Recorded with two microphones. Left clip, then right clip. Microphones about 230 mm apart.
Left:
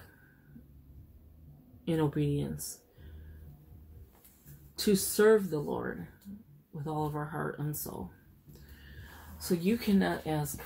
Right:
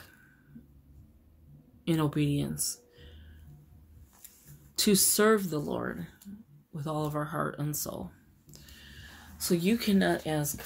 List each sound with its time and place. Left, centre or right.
1.9 s speech: right
4.7 s speech: right
9.6 s speech: right